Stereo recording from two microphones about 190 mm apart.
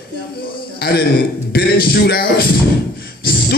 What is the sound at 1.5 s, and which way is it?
Speech, 55° left (ahead or behind).